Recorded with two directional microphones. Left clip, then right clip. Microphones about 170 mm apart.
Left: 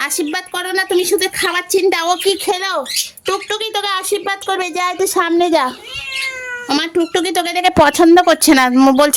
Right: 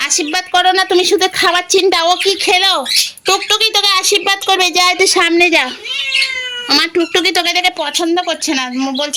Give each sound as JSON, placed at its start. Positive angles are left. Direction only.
{"t": 0.5, "sound": "speech", "side_deg": 0}
{"t": 1.5, "sound": "speech", "side_deg": 15}
{"t": 2.0, "sound": "speech", "side_deg": 30}
{"t": 2.5, "sound": "speech", "side_deg": 0}
{"t": 6.7, "sound": "speech", "side_deg": 20}
{"t": 7.8, "sound": "speech", "side_deg": 80}